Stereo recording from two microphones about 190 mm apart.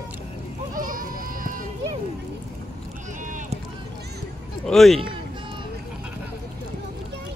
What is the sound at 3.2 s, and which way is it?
Run, 40° right (ahead or behind).